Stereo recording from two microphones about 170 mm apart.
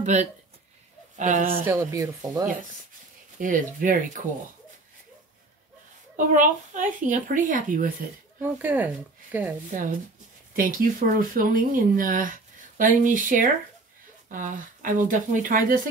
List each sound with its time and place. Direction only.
0.0 s speech: 45° right (ahead or behind)
1.6 s speech: 15° right (ahead or behind)
3.3 s speech: 50° right (ahead or behind)
6.1 s speech: 50° right (ahead or behind)
8.4 s speech: 10° right (ahead or behind)
9.7 s speech: 50° right (ahead or behind)